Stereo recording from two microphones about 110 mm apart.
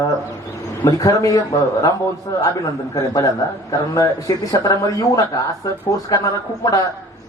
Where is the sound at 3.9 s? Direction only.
30° left (ahead or behind).